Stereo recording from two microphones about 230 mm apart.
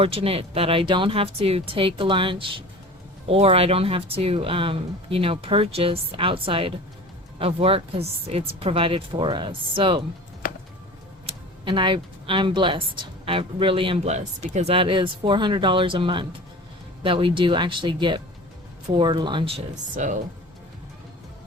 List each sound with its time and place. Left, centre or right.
0.0 s speech: right
11.3 s speech: right